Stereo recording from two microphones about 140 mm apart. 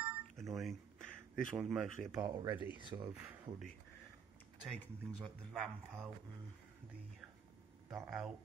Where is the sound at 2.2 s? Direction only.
30° right (ahead or behind).